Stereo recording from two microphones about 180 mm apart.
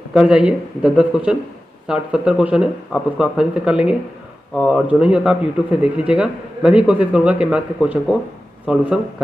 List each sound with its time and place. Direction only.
0.1 s a man's voice: 5° right (ahead or behind)